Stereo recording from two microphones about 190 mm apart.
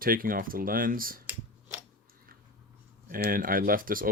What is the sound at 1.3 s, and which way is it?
Scissors, 10° right (ahead or behind).